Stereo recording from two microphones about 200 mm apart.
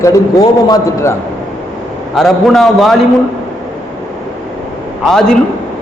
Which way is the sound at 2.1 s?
Centre (ahead or behind).